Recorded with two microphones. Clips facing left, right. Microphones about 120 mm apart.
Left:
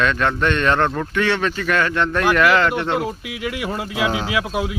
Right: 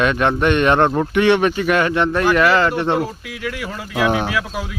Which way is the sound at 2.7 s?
20° right (ahead or behind).